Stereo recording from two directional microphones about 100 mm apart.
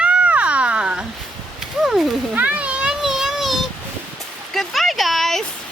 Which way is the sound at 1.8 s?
5° right (ahead or behind).